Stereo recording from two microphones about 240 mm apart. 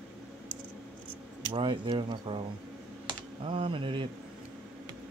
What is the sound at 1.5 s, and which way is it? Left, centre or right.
Speech, right.